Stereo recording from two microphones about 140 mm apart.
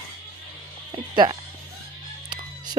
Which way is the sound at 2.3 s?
30° right (ahead or behind).